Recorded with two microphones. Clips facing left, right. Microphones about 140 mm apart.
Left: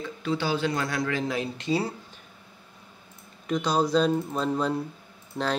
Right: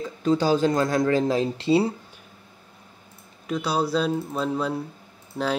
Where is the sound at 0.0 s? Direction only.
40° right (ahead or behind).